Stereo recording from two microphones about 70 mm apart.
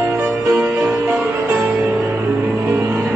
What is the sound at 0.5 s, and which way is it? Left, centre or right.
Music, right.